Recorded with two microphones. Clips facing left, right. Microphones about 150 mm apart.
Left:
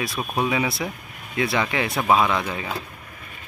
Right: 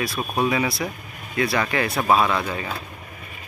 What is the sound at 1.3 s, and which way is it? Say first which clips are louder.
Speech: right 1 dB; 20° left (ahead or behind).